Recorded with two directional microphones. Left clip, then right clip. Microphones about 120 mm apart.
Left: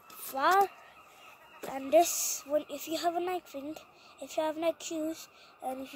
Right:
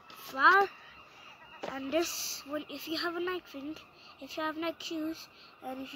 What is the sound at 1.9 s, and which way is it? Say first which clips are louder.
Speech: left 8 dB; 30° right (ahead or behind).